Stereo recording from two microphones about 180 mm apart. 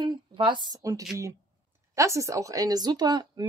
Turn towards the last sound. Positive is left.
turn(degrees=-25)  # may be behind; listen again after turning